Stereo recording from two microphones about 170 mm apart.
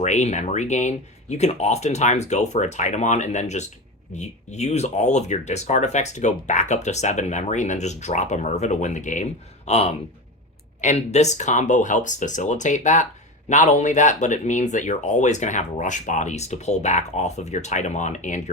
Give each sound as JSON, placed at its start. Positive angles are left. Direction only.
{"t": 0.0, "sound": "speech", "side_deg": 40}